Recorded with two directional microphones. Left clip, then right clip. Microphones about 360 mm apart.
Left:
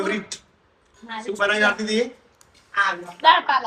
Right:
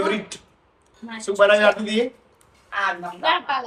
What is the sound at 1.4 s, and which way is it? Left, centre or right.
Speech, centre.